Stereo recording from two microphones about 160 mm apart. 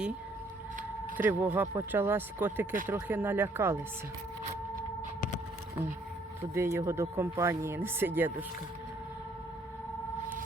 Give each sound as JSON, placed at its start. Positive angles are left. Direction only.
{"t": 1.1, "sound": "speech", "side_deg": -10}
{"t": 6.5, "sound": "speech", "side_deg": -15}